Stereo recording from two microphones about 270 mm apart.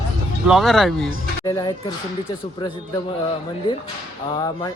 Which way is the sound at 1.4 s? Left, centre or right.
Centre.